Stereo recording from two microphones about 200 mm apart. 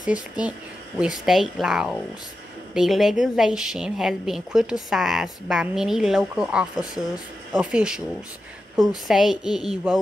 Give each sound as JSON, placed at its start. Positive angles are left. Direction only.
{"t": 0.1, "sound": "a woman's voice", "side_deg": -5}